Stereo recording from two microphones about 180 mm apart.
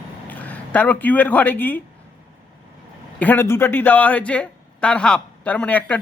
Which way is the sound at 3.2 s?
10° left (ahead or behind).